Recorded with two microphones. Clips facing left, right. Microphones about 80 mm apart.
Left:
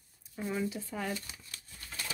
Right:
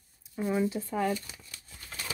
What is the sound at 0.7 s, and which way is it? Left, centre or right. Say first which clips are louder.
Speech: right 7 dB; right.